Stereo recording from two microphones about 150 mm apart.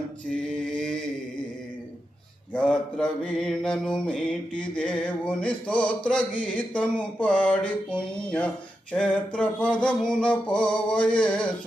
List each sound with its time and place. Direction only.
0.3 s mantra: 5° left (ahead or behind)
2.5 s mantra: 5° left (ahead or behind)